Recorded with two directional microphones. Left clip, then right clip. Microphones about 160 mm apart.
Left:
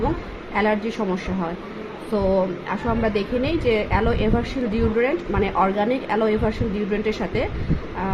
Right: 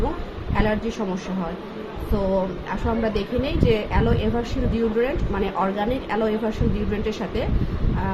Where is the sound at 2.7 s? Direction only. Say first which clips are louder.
Left 2 dB; 25° left (ahead or behind).